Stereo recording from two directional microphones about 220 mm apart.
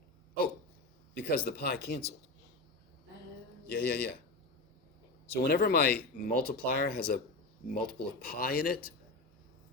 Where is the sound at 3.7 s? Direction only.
45° left (ahead or behind).